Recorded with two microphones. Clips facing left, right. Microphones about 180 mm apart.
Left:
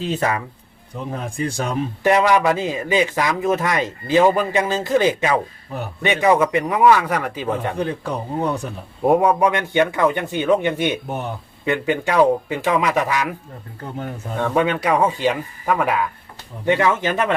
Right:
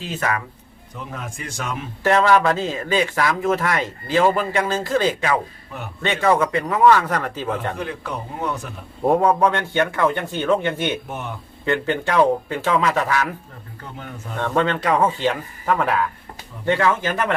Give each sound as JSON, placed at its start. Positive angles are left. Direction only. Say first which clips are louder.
{"t": 0.0, "sound": "speech", "louder": "left 3 dB", "side_deg": 30}
{"t": 2.0, "sound": "speech", "louder": "even", "side_deg": 15}
{"t": 7.8, "sound": "speech", "louder": "left 5 dB", "side_deg": 35}
{"t": 9.0, "sound": "speech", "louder": "left 1 dB", "side_deg": 15}
{"t": 11.1, "sound": "speech", "louder": "left 4 dB", "side_deg": 35}
{"t": 11.6, "sound": "speech", "louder": "left 1 dB", "side_deg": 15}
{"t": 14.3, "sound": "speech", "louder": "left 2 dB", "side_deg": 10}